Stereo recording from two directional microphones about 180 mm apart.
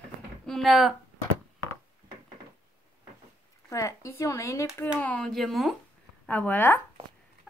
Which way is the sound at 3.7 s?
15° left (ahead or behind).